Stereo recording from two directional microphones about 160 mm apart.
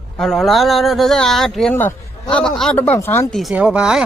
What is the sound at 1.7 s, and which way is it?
Speech, 15° left (ahead or behind).